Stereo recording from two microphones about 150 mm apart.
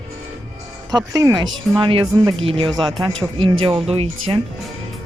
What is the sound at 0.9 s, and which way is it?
Speech, 25° right (ahead or behind).